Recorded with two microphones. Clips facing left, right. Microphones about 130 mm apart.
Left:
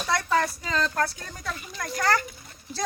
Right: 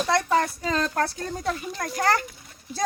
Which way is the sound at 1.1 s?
35° right (ahead or behind).